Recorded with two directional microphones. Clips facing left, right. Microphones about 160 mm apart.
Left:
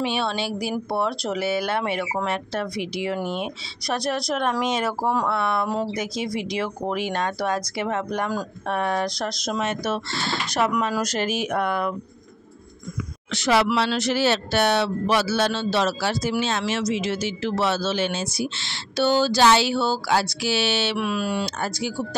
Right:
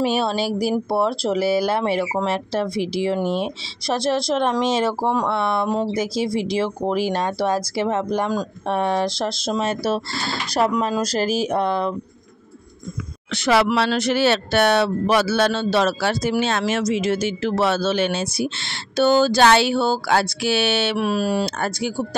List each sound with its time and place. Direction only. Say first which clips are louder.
0.0 s speech: right 5 dB; 40° right (ahead or behind)
13.3 s speech: right 2 dB; 60° right (ahead or behind)
21.0 s speech: right 4 dB; 40° right (ahead or behind)
21.5 s speech: right 3 dB; 55° right (ahead or behind)